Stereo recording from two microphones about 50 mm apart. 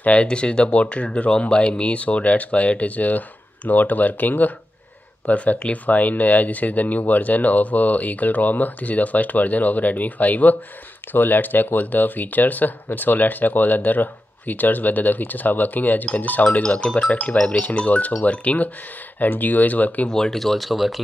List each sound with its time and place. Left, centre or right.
0.0 s speech: left
16.6 s speech: left
19.1 s speech: left
20.1 s speech: centre